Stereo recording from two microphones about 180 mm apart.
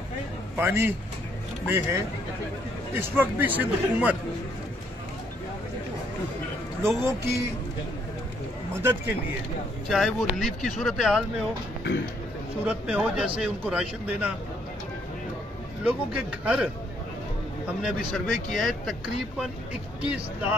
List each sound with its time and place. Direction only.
0.6 s a man's voice: 10° right (ahead or behind)
6.8 s a man's voice: 15° right (ahead or behind)
9.8 s speech: centre (ahead or behind)
12.6 s a man's voice: 5° right (ahead or behind)
15.8 s a man's voice: 10° right (ahead or behind)
17.6 s a man's voice: centre (ahead or behind)